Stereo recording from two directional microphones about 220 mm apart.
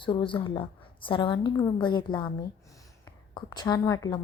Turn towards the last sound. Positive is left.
turn(degrees=15)  # may be behind; listen again after turning